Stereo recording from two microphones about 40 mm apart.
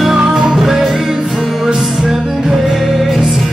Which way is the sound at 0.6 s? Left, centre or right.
Centre.